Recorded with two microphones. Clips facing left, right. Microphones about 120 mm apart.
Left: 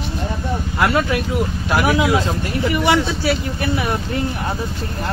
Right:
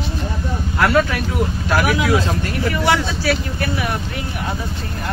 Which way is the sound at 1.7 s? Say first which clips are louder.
Left 1 dB; 20° left (ahead or behind).